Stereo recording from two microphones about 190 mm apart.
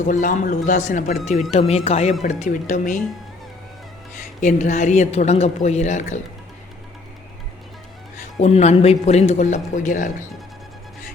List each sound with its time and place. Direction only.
0.0 s speech: 45° left (ahead or behind)
4.4 s speech: 40° left (ahead or behind)
8.4 s speech: 35° left (ahead or behind)